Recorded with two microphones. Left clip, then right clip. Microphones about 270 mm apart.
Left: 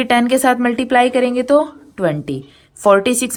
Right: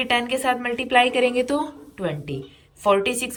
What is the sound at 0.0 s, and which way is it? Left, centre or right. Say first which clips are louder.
A woman's voice: left 8 dB; centre.